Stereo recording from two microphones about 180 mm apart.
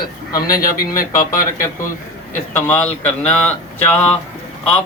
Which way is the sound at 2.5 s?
10° left (ahead or behind).